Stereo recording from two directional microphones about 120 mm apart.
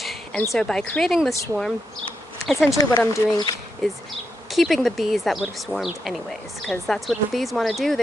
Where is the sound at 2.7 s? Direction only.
30° left (ahead or behind).